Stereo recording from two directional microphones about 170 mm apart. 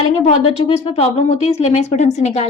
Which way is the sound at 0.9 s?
40° left (ahead or behind).